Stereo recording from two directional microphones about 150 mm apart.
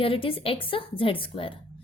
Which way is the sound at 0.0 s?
35° left (ahead or behind).